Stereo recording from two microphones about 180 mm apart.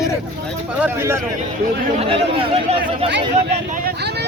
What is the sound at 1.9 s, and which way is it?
Speech, 30° right (ahead or behind).